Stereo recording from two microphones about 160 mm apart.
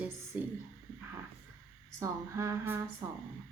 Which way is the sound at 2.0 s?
20° right (ahead or behind).